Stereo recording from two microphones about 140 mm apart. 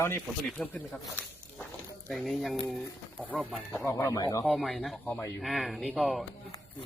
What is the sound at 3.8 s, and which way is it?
Speech, 20° left (ahead or behind).